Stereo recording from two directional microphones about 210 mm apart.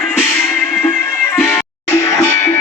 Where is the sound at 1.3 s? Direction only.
10° left (ahead or behind).